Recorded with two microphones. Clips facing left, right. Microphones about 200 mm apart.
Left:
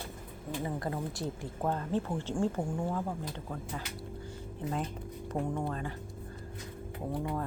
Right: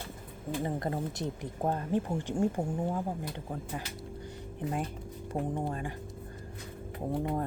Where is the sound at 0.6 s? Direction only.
30° right (ahead or behind).